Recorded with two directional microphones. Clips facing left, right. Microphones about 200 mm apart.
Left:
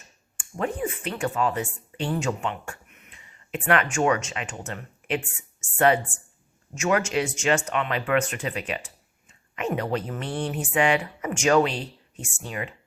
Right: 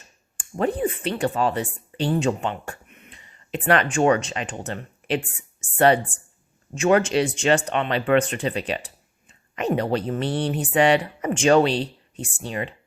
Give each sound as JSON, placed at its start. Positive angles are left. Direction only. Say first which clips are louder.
{"t": 0.3, "sound": "speech", "louder": "right 5 dB", "side_deg": -35}